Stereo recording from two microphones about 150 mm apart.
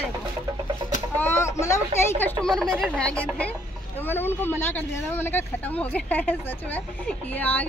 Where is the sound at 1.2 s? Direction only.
15° left (ahead or behind).